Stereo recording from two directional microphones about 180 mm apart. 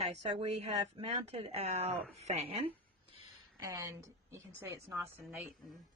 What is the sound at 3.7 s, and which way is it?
Speech, 15° right (ahead or behind).